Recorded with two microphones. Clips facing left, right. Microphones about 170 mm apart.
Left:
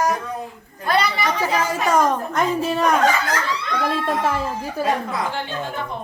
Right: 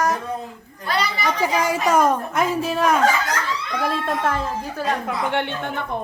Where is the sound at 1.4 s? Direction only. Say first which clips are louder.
Right 3 dB; 15° right (ahead or behind); by 4.9 s 10° left (ahead or behind).